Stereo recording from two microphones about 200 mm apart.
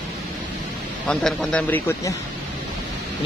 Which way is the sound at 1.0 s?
5° left (ahead or behind).